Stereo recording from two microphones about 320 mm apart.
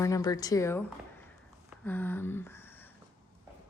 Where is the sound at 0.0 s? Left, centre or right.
Centre.